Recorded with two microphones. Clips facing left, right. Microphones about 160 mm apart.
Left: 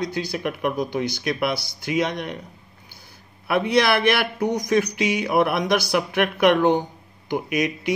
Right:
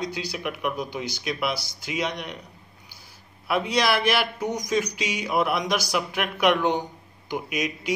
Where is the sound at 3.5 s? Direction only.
55° left (ahead or behind).